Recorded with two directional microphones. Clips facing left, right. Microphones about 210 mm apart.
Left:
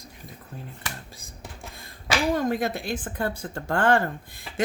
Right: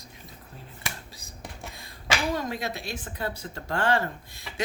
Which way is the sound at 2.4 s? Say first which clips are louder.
Left 6 dB; 50° left (ahead or behind).